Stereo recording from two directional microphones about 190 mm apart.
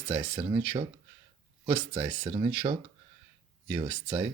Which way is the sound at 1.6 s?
10° right (ahead or behind).